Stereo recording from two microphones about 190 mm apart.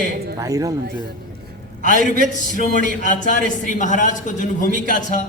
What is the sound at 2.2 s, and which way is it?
A man's voice, 40° left (ahead or behind).